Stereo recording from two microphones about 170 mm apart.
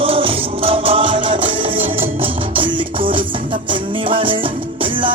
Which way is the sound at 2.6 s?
30° right (ahead or behind).